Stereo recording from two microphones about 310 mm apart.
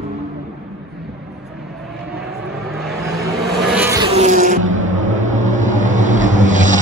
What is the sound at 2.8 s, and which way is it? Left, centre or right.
Vehicle, centre.